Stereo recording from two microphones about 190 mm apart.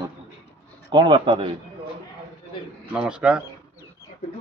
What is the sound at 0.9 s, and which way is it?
Speech, 25° right (ahead or behind).